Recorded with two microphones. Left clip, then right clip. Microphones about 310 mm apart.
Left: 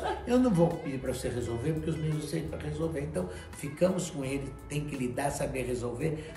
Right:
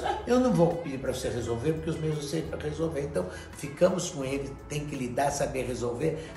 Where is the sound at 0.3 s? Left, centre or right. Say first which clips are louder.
Right 2 dB; centre.